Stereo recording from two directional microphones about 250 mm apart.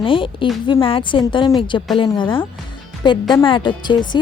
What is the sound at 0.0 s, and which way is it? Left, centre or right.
A woman's voice, centre.